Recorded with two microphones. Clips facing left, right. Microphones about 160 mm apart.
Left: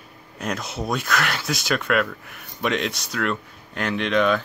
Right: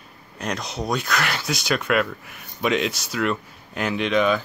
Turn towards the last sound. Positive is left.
turn(degrees=-5)  # may be behind; listen again after turning